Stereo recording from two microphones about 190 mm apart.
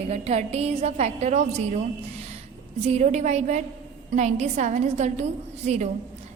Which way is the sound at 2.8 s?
35° right (ahead or behind).